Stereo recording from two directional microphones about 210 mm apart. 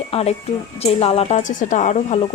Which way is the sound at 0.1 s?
30° left (ahead or behind).